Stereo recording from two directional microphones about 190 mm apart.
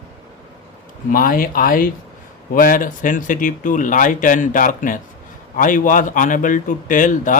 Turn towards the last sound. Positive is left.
turn(degrees=45)  # may be behind; listen again after turning